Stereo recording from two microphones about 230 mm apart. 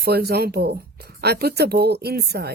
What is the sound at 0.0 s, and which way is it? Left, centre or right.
Speech, right.